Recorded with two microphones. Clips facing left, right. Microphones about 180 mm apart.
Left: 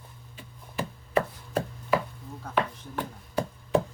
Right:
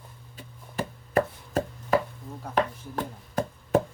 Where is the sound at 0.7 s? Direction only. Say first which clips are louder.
Right 1 dB; 45° right (ahead or behind).